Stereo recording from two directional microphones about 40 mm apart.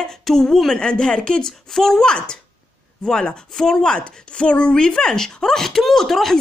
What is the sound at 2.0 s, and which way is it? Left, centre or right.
Speech, left.